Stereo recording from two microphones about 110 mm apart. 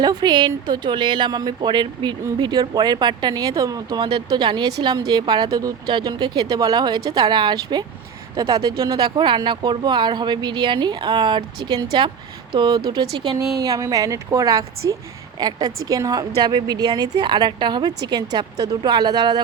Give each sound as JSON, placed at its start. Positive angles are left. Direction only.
{"t": 0.0, "sound": "speech", "side_deg": -40}
{"t": 13.6, "sound": "speech", "side_deg": -30}